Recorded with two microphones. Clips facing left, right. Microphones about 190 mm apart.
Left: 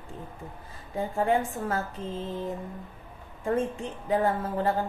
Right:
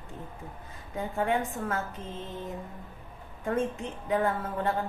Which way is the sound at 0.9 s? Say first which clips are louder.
Left 3 dB; 30° left (ahead or behind).